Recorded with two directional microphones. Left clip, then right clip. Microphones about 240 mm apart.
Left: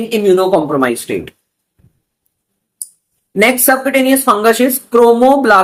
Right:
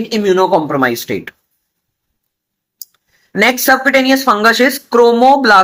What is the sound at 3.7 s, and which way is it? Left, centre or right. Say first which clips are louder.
Speech: right 1 dB; right.